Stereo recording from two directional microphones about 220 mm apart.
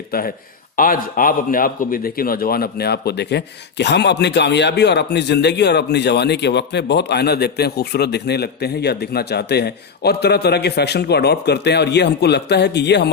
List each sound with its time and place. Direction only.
0.8 s a man's voice: 40° left (ahead or behind)